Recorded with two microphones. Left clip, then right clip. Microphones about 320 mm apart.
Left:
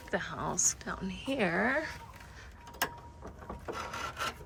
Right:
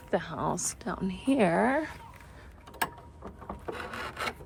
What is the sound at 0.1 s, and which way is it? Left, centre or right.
A woman's voice, centre.